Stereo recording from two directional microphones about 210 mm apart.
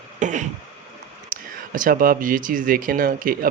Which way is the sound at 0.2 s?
35° right (ahead or behind).